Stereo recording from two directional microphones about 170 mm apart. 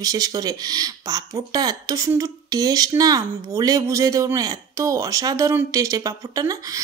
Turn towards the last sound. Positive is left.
turn(degrees=-20)  # may be behind; listen again after turning